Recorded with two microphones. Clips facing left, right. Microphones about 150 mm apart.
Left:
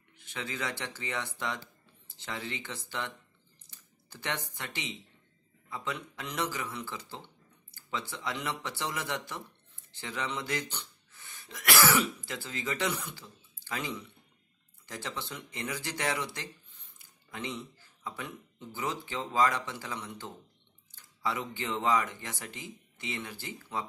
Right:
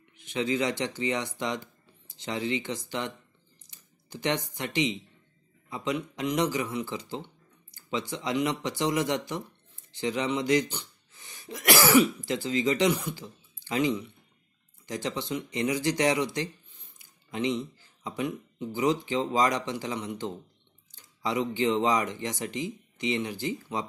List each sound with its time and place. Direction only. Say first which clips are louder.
0.2 s speech: right 10 dB; 20° right (ahead or behind)